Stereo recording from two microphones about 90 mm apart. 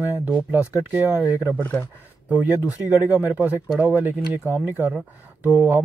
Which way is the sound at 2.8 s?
15° right (ahead or behind).